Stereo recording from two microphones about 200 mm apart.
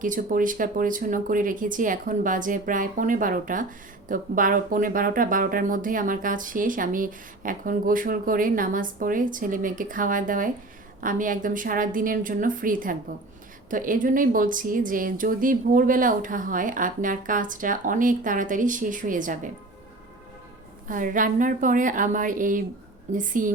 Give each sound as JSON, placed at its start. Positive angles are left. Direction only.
{"t": 0.0, "sound": "a woman's voice", "side_deg": -40}
{"t": 20.8, "sound": "a woman's voice", "side_deg": -40}